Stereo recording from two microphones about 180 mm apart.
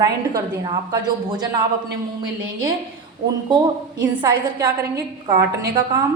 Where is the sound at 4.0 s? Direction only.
25° right (ahead or behind).